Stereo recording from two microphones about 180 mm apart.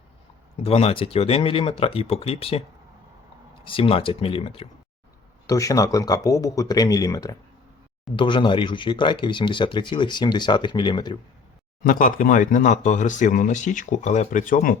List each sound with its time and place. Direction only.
0.6 s speech: 35° left (ahead or behind)
5.5 s speech: 20° left (ahead or behind)
11.8 s speech: 50° left (ahead or behind)